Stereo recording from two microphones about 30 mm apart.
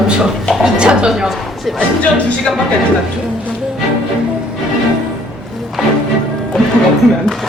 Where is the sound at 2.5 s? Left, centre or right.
Centre.